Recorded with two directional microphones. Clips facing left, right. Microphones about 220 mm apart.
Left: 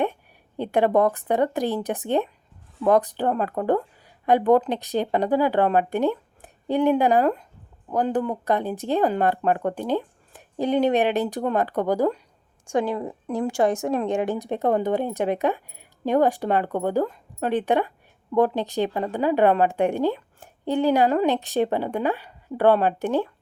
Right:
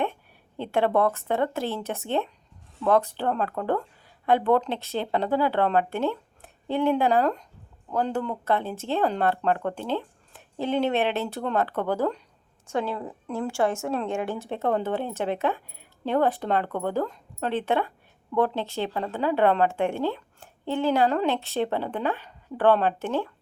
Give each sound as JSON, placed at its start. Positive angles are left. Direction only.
{"t": 0.0, "sound": "a woman's voice", "side_deg": 15}